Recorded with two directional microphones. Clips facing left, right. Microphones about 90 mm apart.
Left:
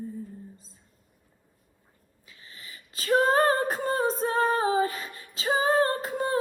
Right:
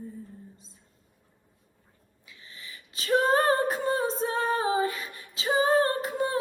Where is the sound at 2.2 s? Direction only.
35° left (ahead or behind).